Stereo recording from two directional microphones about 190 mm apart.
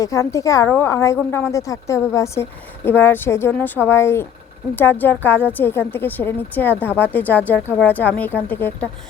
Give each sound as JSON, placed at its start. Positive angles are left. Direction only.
{"t": 0.0, "sound": "a woman's voice", "side_deg": 15}